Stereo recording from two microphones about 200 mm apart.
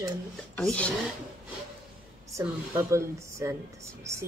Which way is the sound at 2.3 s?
15° right (ahead or behind).